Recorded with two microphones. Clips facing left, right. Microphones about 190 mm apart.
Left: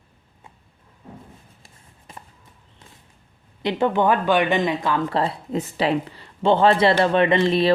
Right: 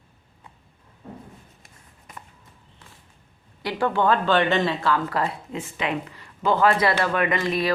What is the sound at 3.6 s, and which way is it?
Speech, 20° left (ahead or behind).